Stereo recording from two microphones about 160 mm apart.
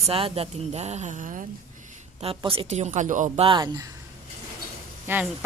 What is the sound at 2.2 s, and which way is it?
A woman's voice, 35° right (ahead or behind).